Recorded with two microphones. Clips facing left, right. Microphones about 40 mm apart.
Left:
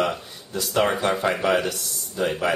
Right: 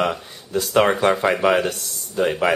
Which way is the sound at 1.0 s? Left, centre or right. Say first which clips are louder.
Right 5 dB; right.